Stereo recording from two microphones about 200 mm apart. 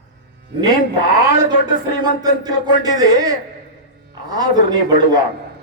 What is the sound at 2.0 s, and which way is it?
A man's voice, 20° right (ahead or behind).